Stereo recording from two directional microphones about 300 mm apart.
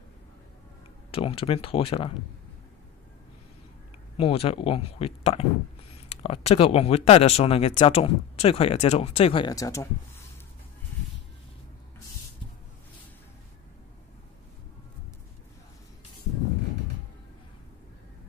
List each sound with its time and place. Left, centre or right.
1.1 s speech: centre
4.2 s speech: centre